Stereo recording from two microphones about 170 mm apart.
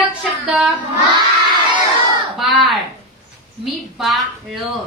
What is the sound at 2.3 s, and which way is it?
Speech, centre (ahead or behind).